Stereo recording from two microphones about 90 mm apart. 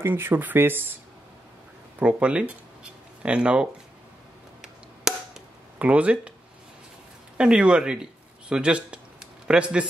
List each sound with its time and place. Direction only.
0.0 s speech: 25° right (ahead or behind)
2.0 s speech: 15° right (ahead or behind)
4.6 s chop: 5° right (ahead or behind)
5.8 s speech: 15° right (ahead or behind)
7.3 s speech: 10° right (ahead or behind)